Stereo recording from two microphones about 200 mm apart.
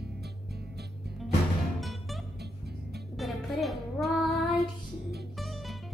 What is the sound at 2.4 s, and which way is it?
Music, 55° right (ahead or behind).